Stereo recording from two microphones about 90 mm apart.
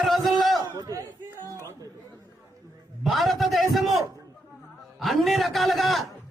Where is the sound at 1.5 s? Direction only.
30° right (ahead or behind).